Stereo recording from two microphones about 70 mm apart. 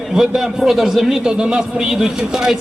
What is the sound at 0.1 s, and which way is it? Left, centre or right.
A man's voice, centre.